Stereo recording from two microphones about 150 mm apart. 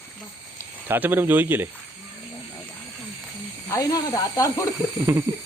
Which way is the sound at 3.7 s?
25° left (ahead or behind).